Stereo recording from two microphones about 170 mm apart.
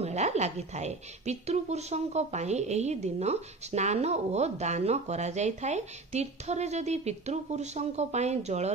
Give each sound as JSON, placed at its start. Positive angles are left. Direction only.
{"t": 0.0, "sound": "a woman's voice", "side_deg": -40}